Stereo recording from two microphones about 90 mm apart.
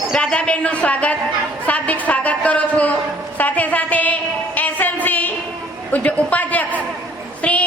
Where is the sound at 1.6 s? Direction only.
15° left (ahead or behind).